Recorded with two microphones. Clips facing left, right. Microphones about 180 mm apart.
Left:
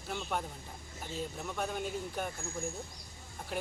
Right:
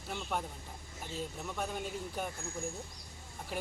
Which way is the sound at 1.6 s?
Centre (ahead or behind).